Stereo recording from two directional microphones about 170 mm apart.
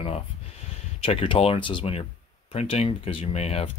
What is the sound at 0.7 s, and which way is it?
Speech, 35° left (ahead or behind).